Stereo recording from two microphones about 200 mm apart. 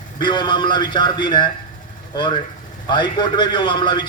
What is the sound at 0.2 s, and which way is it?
A man's voice, 20° left (ahead or behind).